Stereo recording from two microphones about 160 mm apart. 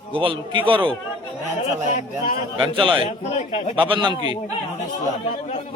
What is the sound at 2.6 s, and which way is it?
Speech, 35° right (ahead or behind).